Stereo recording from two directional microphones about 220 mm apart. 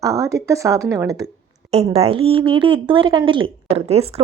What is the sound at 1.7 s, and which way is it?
Speech, 25° right (ahead or behind).